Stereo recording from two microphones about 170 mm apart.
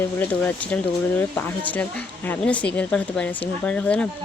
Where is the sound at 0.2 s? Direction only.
10° left (ahead or behind).